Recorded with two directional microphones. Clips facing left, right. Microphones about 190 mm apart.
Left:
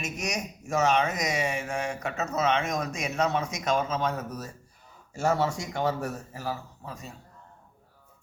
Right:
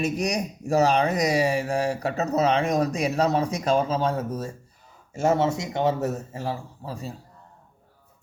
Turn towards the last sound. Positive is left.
turn(degrees=-30)  # may be behind; listen again after turning